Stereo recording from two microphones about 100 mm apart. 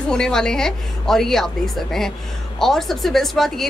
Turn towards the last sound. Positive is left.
turn(degrees=5)  # may be behind; listen again after turning